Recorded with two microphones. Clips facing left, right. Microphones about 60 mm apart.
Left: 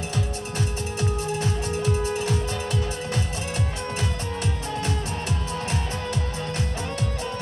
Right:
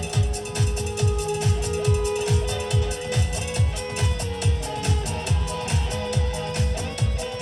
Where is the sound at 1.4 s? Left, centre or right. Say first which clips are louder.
Right 1 dB; left.